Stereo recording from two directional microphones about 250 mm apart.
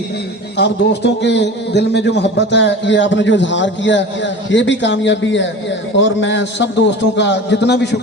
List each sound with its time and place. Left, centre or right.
0.5 s a man's voice: left